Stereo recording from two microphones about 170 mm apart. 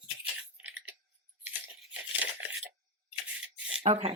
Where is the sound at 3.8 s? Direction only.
40° right (ahead or behind).